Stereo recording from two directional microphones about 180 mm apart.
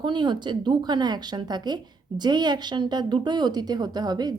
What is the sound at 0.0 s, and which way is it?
Speech, 25° right (ahead or behind).